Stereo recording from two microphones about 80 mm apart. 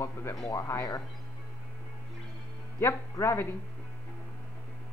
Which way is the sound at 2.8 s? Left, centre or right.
Left.